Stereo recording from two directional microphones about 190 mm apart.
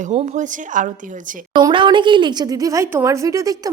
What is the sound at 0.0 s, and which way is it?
Speech, 40° right (ahead or behind).